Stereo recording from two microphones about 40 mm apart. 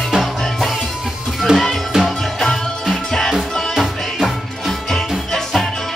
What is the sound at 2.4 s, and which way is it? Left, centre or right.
Music, centre.